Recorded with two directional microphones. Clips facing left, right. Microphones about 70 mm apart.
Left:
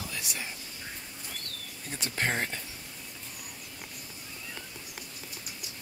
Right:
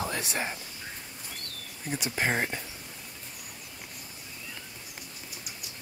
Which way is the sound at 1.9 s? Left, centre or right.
Centre.